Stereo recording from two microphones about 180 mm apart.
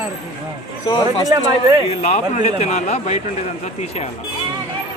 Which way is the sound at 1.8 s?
35° left (ahead or behind).